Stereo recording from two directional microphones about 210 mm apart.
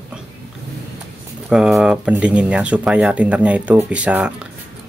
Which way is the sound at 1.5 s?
5° right (ahead or behind).